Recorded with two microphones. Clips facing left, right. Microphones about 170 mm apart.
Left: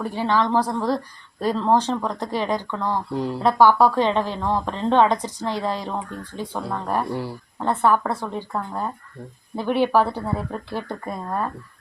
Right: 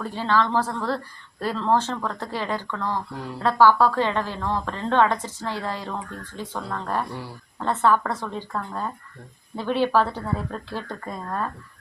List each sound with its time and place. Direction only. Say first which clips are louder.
0.0 s a woman's voice: left 2 dB; 15° left (ahead or behind)